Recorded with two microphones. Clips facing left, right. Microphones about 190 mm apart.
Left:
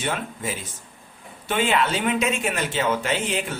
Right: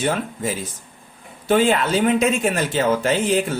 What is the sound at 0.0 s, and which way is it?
Speech, 40° right (ahead or behind).